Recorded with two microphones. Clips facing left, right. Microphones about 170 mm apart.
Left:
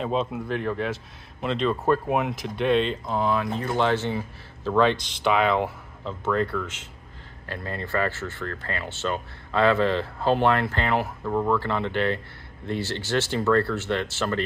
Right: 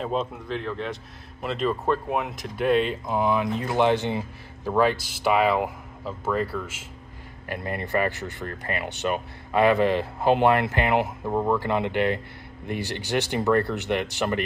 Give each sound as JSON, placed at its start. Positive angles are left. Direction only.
{"t": 0.0, "sound": "speech", "side_deg": 0}
{"t": 0.5, "sound": "speech", "side_deg": 10}
{"t": 1.4, "sound": "speech", "side_deg": -5}